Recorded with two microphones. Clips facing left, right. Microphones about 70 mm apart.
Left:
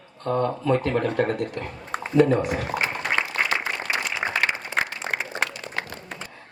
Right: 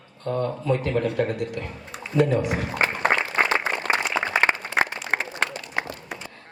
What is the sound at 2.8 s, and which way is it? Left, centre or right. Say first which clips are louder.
Applause: right 3 dB; right.